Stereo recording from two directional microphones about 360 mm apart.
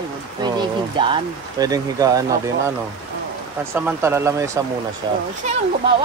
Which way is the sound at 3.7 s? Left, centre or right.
Centre.